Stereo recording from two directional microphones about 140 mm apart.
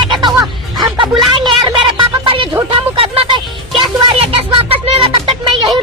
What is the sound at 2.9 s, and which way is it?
Music, 40° right (ahead or behind).